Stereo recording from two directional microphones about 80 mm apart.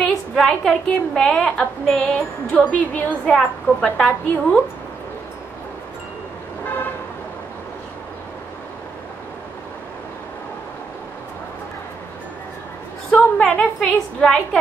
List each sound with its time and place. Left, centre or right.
0.0 s a woman's voice: centre
13.1 s a sound: centre
13.7 s a woman's voice: centre